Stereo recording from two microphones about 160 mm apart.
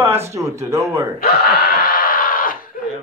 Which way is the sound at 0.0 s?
15° right (ahead or behind).